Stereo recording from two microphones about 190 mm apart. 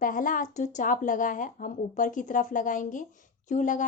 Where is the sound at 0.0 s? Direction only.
45° left (ahead or behind).